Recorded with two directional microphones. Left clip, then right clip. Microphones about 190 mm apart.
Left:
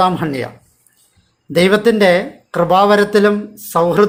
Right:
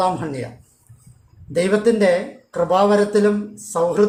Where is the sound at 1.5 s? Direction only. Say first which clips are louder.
Left 5 dB; 25° left (ahead or behind).